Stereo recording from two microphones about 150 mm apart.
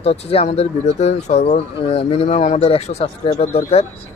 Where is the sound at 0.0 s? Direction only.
40° left (ahead or behind).